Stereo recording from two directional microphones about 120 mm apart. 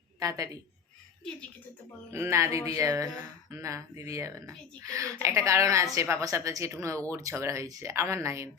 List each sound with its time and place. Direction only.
0.2 s a woman's voice: 30° right (ahead or behind)
2.0 s a woman's voice: 20° right (ahead or behind)